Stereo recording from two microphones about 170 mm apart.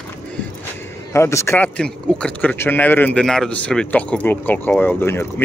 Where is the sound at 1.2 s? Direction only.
15° left (ahead or behind).